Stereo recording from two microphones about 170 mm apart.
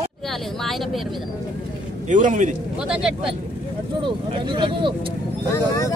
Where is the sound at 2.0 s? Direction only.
50° right (ahead or behind).